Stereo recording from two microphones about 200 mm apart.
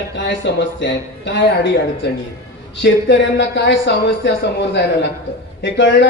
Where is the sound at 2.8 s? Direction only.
60° left (ahead or behind).